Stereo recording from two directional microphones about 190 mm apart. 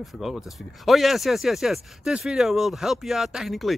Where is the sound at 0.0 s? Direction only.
Centre (ahead or behind).